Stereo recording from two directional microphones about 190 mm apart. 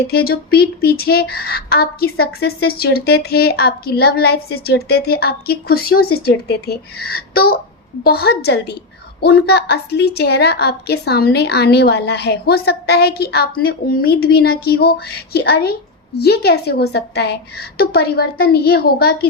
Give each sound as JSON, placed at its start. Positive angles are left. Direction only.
{"t": 0.1, "sound": "speech", "side_deg": 55}